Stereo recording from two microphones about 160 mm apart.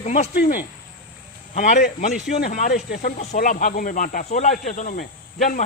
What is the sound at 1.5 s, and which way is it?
Speech, 55° left (ahead or behind).